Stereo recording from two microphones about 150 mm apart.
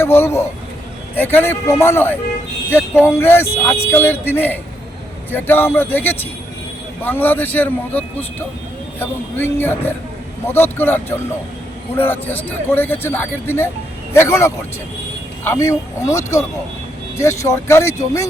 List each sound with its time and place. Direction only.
0.0 s a man's voice: 15° left (ahead or behind)